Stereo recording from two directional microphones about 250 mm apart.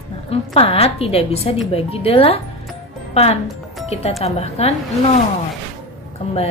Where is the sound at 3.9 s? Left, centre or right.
Left.